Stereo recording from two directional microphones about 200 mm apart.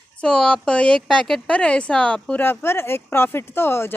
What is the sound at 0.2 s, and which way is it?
A woman's voice, 5° left (ahead or behind).